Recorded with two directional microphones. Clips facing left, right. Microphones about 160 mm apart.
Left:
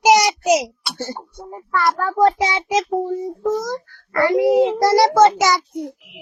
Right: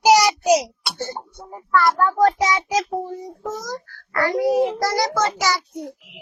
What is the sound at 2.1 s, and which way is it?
Speech, 25° left (ahead or behind).